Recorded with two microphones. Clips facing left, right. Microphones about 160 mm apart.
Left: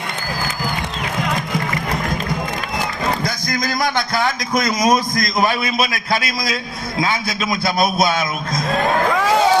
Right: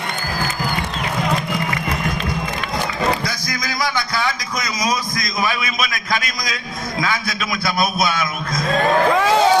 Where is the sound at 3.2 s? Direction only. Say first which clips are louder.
Left 4 dB; 50° left (ahead or behind).